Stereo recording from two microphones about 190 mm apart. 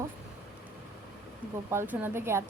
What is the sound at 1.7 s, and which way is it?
Speech, 10° right (ahead or behind).